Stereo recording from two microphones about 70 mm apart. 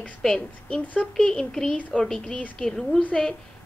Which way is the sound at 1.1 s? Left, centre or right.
Centre.